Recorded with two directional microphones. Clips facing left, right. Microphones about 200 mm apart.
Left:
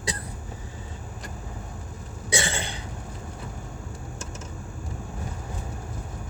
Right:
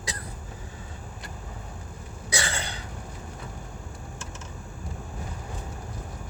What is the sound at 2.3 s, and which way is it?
Cough, 25° left (ahead or behind).